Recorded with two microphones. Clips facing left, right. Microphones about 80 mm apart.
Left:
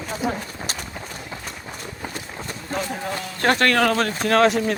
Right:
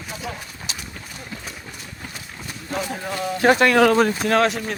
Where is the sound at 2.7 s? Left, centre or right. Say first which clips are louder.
Even; centre.